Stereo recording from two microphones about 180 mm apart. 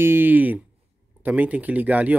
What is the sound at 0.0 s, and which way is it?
Speech, 10° right (ahead or behind).